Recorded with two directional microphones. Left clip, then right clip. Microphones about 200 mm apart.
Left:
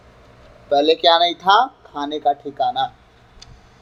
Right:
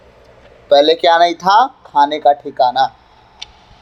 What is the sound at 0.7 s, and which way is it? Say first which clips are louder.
Speech: right 5 dB; 20° right (ahead or behind).